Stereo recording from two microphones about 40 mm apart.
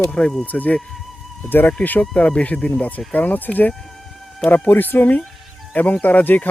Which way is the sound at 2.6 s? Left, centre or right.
Left.